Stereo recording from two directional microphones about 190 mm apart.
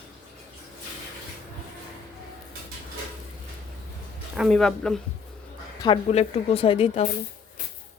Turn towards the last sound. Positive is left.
turn(degrees=30)  # may be behind; listen again after turning